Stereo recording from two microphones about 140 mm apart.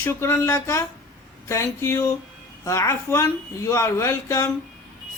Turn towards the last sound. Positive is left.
turn(degrees=20)  # may be behind; listen again after turning